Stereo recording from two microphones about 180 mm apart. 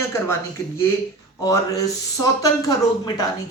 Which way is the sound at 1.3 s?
20° left (ahead or behind).